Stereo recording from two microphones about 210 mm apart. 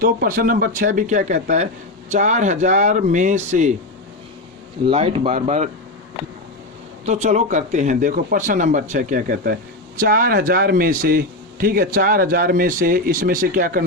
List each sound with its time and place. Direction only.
0.0 s speech: 45° right (ahead or behind)
4.9 s speech: 30° right (ahead or behind)
7.0 s a man's voice: 35° right (ahead or behind)